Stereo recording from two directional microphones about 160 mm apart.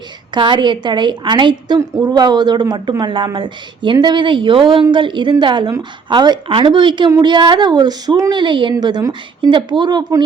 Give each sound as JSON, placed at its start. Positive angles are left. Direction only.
{"t": 0.3, "sound": "a woman's voice", "side_deg": -30}